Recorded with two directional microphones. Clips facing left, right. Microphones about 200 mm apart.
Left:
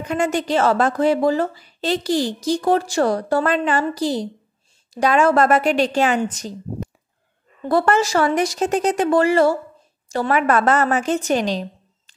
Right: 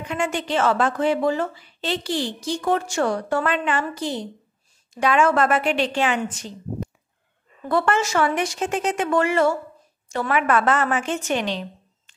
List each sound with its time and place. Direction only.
0.0 s a woman's voice: 40° left (ahead or behind)
7.6 s a woman's voice: 35° left (ahead or behind)